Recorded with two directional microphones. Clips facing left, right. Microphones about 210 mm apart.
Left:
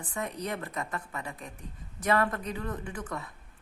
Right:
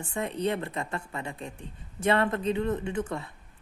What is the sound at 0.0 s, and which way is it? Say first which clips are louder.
Speech: right 6 dB; 25° right (ahead or behind).